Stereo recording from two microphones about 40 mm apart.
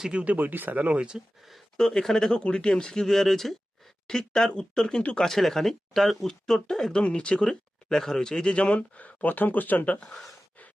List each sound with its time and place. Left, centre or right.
0.3 s speech: right
0.8 s speech: right
1.8 s speech: centre
2.4 s speech: left
5.3 s speech: centre
7.0 s speech: left
8.5 s speech: left